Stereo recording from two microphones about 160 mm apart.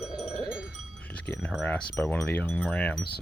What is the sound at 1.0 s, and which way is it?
Wind chime, 10° left (ahead or behind).